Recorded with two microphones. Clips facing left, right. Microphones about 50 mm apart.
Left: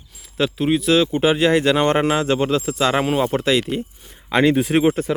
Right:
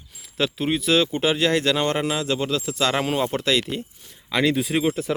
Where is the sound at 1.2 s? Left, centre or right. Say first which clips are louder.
Left 4 dB; centre.